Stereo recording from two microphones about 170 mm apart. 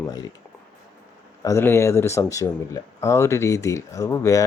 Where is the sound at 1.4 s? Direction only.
15° left (ahead or behind).